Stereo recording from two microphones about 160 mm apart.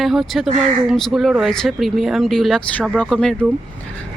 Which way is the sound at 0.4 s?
45° right (ahead or behind).